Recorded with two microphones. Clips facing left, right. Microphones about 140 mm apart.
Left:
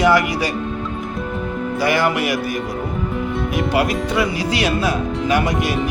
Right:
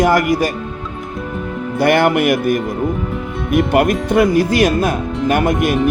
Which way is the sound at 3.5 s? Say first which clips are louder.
Right 7 dB; 55° right (ahead or behind).